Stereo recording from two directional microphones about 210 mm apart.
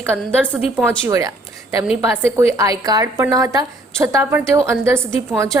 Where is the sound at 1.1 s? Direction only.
15° right (ahead or behind).